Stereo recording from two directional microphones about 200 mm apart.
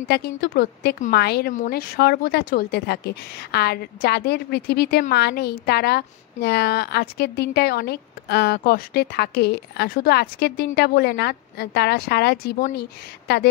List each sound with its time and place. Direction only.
0.1 s speech: 50° left (ahead or behind)